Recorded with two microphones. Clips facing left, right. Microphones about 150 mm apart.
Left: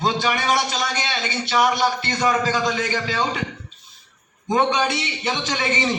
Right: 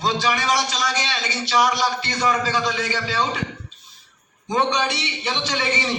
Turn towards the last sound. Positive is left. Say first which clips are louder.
# left 1 dB
turn(degrees=45)  # may be behind; listen again after turning